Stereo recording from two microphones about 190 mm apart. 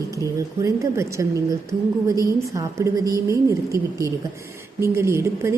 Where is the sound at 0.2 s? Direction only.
15° right (ahead or behind).